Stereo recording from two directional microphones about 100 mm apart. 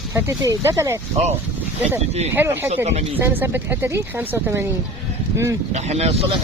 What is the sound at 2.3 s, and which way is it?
Speech, 25° right (ahead or behind).